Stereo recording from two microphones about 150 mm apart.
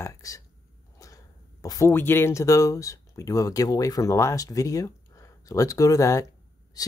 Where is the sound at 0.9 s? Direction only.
20° left (ahead or behind).